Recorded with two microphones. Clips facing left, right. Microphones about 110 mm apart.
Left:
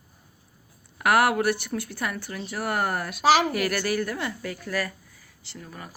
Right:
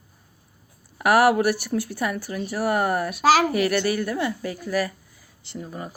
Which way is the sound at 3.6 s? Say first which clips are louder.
Right 4 dB; 20° right (ahead or behind).